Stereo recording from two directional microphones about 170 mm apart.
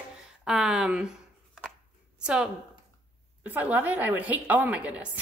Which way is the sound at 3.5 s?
10° right (ahead or behind).